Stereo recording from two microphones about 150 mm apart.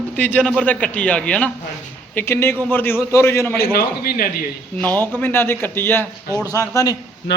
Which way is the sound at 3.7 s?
90° left.